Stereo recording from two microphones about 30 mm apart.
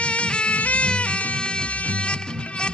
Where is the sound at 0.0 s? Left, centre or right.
Left.